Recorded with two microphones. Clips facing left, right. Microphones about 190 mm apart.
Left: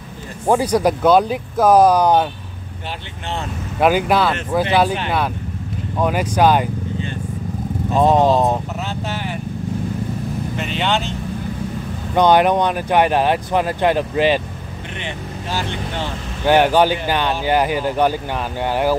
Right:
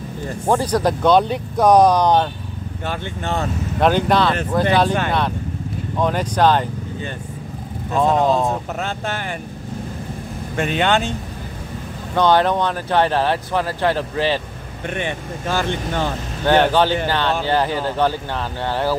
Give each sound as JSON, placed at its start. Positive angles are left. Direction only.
{"t": 0.5, "sound": "speech", "side_deg": 10}
{"t": 3.8, "sound": "speech", "side_deg": 5}
{"t": 5.9, "sound": "speech", "side_deg": 10}
{"t": 7.9, "sound": "speech", "side_deg": 20}
{"t": 8.8, "sound": "speech", "side_deg": -50}
{"t": 10.6, "sound": "speech", "side_deg": -50}
{"t": 12.2, "sound": "speech", "side_deg": 15}
{"t": 15.0, "sound": "speech", "side_deg": -50}
{"t": 16.4, "sound": "speech", "side_deg": 10}